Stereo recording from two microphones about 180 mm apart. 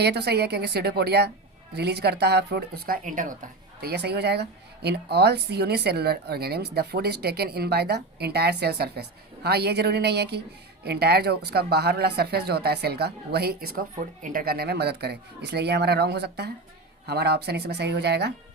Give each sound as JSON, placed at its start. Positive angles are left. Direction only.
{"t": 0.0, "sound": "speech", "side_deg": -65}